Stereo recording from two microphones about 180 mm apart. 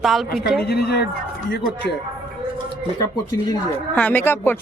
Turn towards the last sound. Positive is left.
turn(degrees=10)  # may be behind; listen again after turning